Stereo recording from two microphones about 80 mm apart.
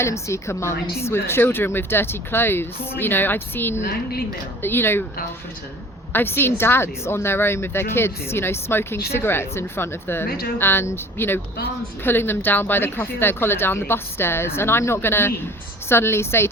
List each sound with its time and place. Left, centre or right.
0.0 s speech: left
6.1 s speech: left